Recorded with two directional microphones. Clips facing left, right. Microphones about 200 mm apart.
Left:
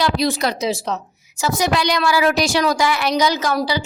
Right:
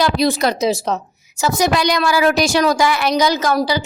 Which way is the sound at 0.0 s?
50° right (ahead or behind).